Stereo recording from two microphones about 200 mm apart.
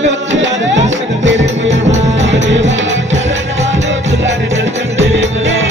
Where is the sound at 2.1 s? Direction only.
65° right (ahead or behind).